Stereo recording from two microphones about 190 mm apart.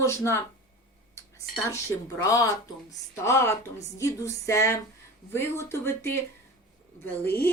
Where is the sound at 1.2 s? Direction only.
15° left (ahead or behind).